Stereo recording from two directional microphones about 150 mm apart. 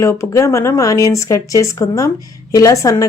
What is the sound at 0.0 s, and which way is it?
Speech, 20° left (ahead or behind).